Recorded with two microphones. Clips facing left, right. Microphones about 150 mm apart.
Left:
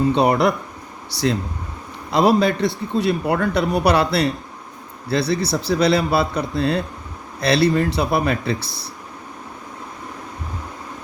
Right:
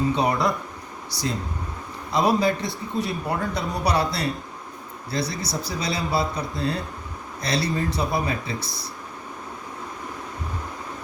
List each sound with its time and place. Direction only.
0.1 s speech: 70° left (ahead or behind)
2.1 s speech: 75° left (ahead or behind)